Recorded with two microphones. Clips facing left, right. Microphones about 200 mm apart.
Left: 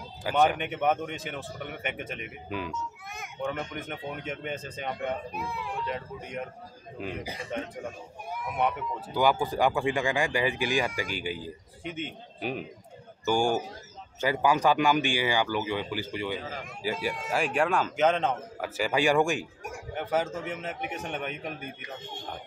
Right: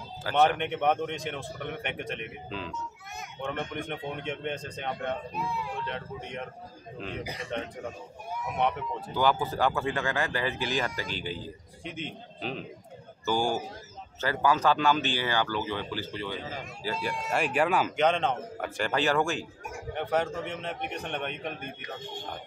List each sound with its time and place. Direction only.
0.2 s speech: 15° left (ahead or behind)
3.4 s speech: centre (ahead or behind)
17.3 s speech: centre (ahead or behind); by 19.4 s 15° left (ahead or behind)
19.9 s speech: 5° left (ahead or behind)